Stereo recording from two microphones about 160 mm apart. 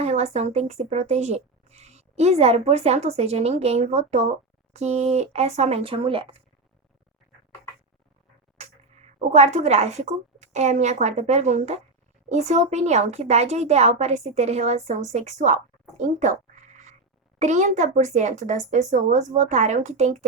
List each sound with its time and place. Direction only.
0.0 s a woman's voice: 45° right (ahead or behind)
8.5 s a woman's voice: 45° right (ahead or behind)